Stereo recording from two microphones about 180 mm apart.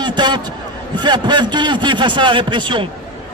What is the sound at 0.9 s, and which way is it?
Speech, 25° right (ahead or behind).